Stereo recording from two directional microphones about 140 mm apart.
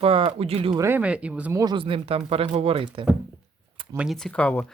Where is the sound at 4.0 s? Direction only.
Centre (ahead or behind).